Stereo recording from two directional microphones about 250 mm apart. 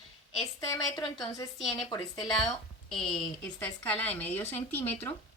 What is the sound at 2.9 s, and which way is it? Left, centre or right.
A woman's voice, centre.